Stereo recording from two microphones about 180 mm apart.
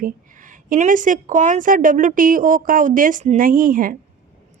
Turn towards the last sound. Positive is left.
turn(degrees=-50)  # may be behind; listen again after turning